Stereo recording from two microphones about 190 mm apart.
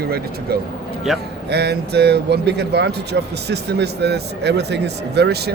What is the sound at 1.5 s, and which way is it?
Speech, 60° right (ahead or behind).